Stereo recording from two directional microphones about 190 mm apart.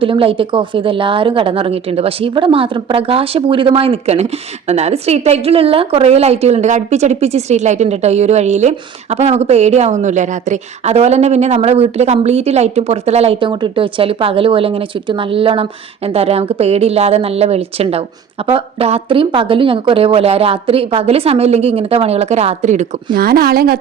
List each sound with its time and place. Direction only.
0.0 s a woman's voice: 30° right (ahead or behind)
23.1 s speech: 50° right (ahead or behind)